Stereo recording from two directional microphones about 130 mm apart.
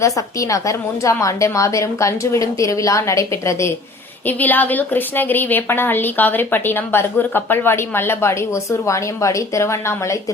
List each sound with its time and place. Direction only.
0.0 s a woman's voice: 25° left (ahead or behind)